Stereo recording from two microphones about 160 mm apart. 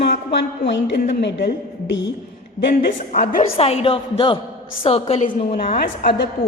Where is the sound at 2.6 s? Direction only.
50° left (ahead or behind).